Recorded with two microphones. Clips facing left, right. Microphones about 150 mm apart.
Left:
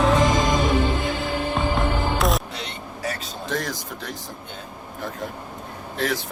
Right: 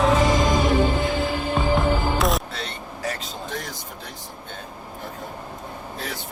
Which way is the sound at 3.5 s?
90° left.